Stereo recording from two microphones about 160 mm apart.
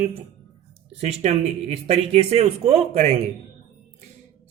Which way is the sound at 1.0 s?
40° right (ahead or behind).